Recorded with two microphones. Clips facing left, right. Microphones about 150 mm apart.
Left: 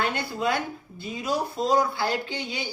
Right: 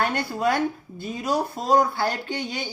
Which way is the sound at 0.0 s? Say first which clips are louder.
Right 3 dB; 50° right (ahead or behind).